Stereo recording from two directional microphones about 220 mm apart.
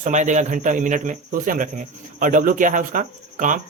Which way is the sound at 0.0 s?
35° right (ahead or behind).